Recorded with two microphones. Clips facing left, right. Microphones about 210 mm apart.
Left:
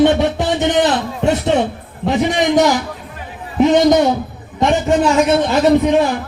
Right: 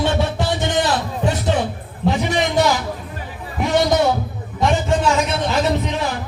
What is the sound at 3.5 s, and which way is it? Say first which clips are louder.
Speech: left 6 dB; 20° left (ahead or behind).